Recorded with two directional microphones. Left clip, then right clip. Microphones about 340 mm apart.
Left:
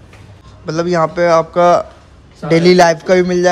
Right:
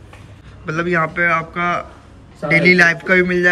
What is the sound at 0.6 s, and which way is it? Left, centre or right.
A man's voice, centre.